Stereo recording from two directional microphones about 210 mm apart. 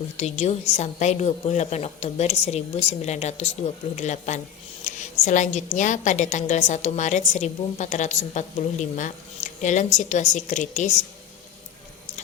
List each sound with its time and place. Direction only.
0.2 s a woman's voice: 30° left (ahead or behind)